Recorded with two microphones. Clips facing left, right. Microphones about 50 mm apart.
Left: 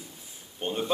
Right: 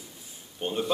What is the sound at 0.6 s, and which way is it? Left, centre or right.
Speech, centre.